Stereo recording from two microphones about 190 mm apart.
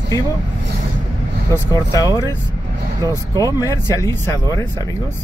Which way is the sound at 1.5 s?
15° left (ahead or behind).